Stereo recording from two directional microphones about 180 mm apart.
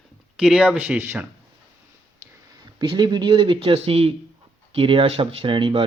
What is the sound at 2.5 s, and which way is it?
Speech, 20° right (ahead or behind).